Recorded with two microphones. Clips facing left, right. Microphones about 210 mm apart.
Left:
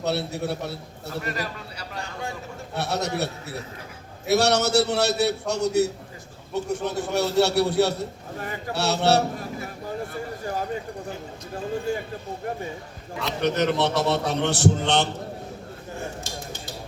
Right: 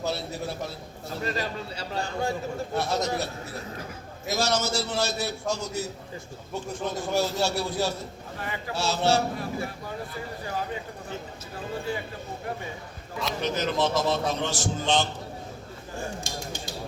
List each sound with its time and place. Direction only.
0.0 s a man's voice: 65° left (ahead or behind)
1.2 s a man's voice: 25° right (ahead or behind)
2.7 s a man's voice: 65° left (ahead or behind)
11.9 s speech: 45° left (ahead or behind)
13.4 s a man's voice: 65° left (ahead or behind)
16.2 s cutlery: 15° right (ahead or behind)